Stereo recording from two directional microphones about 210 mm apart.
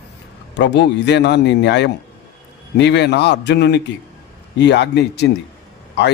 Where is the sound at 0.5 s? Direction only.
55° left (ahead or behind).